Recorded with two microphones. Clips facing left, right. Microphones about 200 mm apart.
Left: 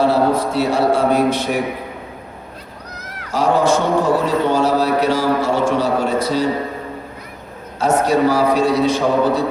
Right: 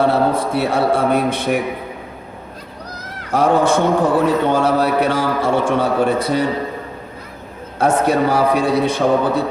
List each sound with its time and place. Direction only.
0.0 s a man's voice: 55° right (ahead or behind)
3.3 s a man's voice: 55° right (ahead or behind)
7.8 s a man's voice: 55° right (ahead or behind)